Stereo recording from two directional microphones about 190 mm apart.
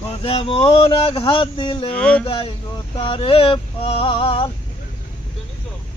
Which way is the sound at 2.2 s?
30° left (ahead or behind).